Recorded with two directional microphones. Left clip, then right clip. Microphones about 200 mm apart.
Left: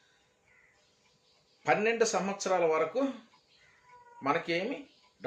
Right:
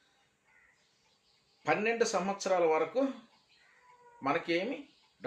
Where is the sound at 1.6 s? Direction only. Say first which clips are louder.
Left 3 dB; 10° left (ahead or behind).